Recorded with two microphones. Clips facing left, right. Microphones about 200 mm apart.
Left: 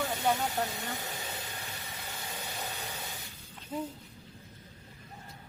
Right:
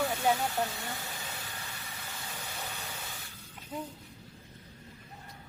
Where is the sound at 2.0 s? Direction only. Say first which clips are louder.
Left 2 dB; 20° left (ahead or behind).